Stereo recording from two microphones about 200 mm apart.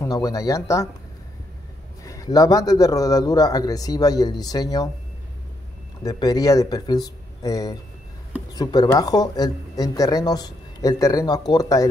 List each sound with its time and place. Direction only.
0.0 s speech: 15° left (ahead or behind)
2.0 s speech: 15° left (ahead or behind)
6.0 s speech: 20° left (ahead or behind)